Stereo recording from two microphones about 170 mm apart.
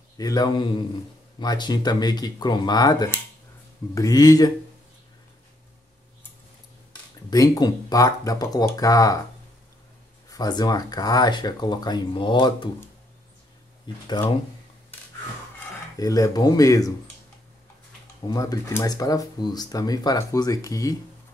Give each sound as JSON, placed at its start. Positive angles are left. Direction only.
{"t": 0.2, "sound": "speech", "side_deg": 25}
{"t": 7.2, "sound": "speech", "side_deg": 20}
{"t": 10.3, "sound": "speech", "side_deg": 25}
{"t": 13.9, "sound": "speech", "side_deg": 25}
{"t": 16.0, "sound": "speech", "side_deg": 20}
{"t": 18.3, "sound": "speech", "side_deg": 20}